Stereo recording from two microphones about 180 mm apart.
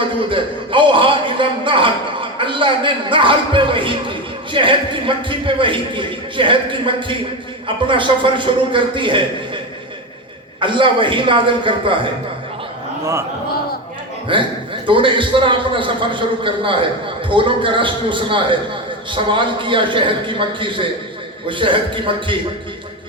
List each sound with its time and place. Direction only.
0.2 s a man's voice: 30° right (ahead or behind)
10.6 s a man's voice: 25° right (ahead or behind)
14.3 s a man's voice: 30° right (ahead or behind)